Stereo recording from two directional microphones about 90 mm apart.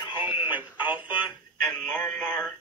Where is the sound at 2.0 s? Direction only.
10° left (ahead or behind).